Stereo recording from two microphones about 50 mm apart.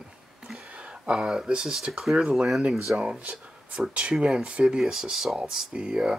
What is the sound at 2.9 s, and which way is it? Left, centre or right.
Speech, right.